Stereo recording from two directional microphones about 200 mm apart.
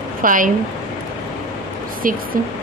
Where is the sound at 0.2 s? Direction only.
40° right (ahead or behind).